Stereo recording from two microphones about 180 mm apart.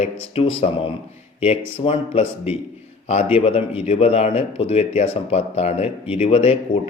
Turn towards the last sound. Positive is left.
turn(degrees=30)  # may be behind; listen again after turning